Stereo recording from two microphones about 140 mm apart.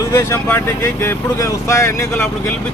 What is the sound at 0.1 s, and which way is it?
Speech, 20° left (ahead or behind).